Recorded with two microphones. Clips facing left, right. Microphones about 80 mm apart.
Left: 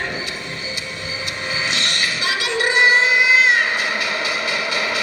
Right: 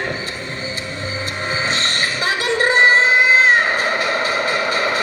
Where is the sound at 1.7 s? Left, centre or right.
Right.